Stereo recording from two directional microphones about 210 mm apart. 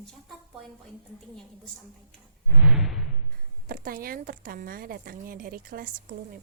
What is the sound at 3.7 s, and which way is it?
A woman's voice, 45° right (ahead or behind).